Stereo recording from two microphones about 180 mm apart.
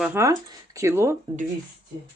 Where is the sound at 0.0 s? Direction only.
15° right (ahead or behind).